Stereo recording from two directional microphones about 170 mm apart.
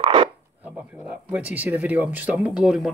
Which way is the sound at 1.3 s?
10° right (ahead or behind).